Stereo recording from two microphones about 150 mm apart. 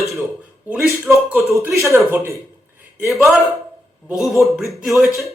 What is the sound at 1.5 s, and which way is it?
Speech, 20° right (ahead or behind).